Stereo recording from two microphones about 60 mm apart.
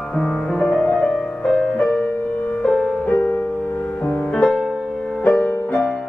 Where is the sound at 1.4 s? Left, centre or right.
Centre.